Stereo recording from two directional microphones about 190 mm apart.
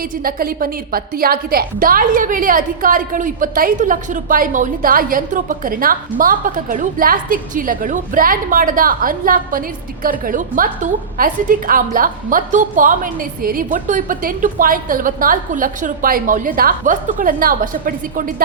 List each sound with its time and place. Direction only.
0.3 s a woman's voice: 50° right (ahead or behind)